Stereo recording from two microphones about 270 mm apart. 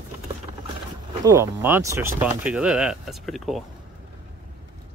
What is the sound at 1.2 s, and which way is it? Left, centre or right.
Speech, centre.